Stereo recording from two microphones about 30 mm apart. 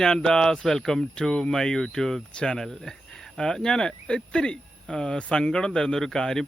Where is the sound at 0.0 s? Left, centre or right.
Left.